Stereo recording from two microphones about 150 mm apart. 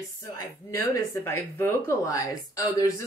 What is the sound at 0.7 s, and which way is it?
Speech, 15° left (ahead or behind).